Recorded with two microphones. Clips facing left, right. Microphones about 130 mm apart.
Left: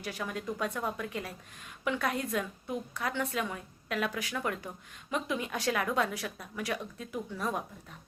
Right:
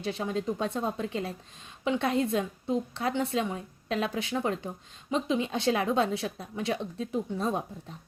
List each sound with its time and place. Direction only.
0.0 s a woman's voice: 25° right (ahead or behind)